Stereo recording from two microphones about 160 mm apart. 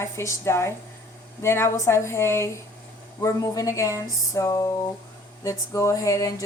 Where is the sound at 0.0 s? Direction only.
20° left (ahead or behind).